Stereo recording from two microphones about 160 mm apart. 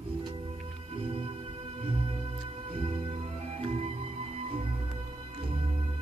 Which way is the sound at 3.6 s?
40° right (ahead or behind).